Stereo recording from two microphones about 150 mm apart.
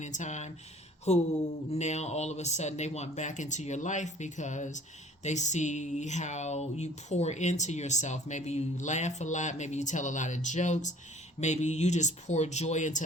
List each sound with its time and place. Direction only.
0.0 s speech: 50° left (ahead or behind)